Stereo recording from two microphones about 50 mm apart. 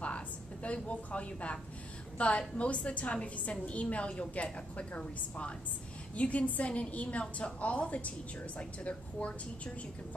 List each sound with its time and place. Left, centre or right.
0.8 s a woman's voice: left